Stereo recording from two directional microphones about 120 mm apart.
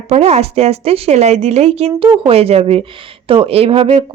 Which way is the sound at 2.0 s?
40° right (ahead or behind).